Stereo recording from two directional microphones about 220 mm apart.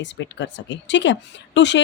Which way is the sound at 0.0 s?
55° left (ahead or behind).